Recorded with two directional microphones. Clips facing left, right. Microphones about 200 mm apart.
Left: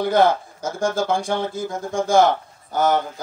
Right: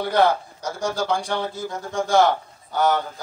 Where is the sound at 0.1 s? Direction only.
45° left (ahead or behind).